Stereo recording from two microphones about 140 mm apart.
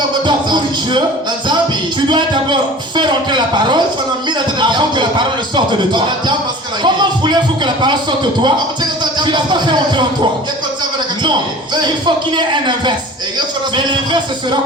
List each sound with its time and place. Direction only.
0.3 s speech: 35° right (ahead or behind)
2.0 s a man's voice: 35° right (ahead or behind)
11.2 s a man's voice: 35° right (ahead or behind)